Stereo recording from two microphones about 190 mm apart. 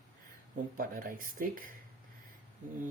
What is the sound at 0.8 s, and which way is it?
Speech, 50° right (ahead or behind).